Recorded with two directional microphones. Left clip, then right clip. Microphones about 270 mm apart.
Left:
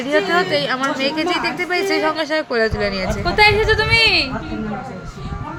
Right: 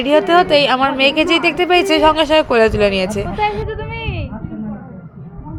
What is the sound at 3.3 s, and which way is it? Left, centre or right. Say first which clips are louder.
Speech: left 10 dB; centre.